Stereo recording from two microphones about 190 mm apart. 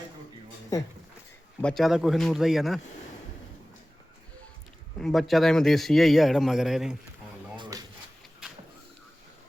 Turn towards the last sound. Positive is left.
turn(degrees=-20)  # may be behind; listen again after turning